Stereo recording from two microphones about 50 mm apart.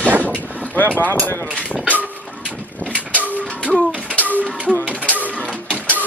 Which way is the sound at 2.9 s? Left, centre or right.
Right.